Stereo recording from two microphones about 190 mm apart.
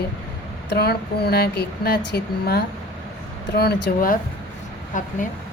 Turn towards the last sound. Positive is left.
turn(degrees=40)  # may be behind; listen again after turning